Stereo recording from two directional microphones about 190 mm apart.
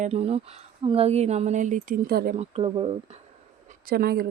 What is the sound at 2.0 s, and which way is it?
Speech, 55° right (ahead or behind).